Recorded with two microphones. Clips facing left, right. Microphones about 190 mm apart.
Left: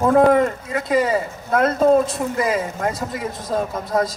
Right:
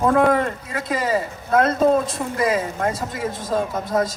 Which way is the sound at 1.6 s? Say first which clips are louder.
Left 3 dB; 30° right (ahead or behind).